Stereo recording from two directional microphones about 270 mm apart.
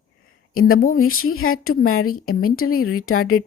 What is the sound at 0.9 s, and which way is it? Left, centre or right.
A woman's voice, left.